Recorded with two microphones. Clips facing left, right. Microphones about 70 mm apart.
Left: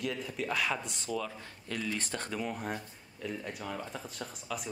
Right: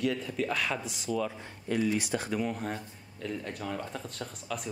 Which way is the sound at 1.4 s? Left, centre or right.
Centre.